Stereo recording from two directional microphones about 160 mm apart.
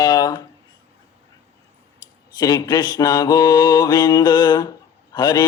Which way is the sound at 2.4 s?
25° left (ahead or behind).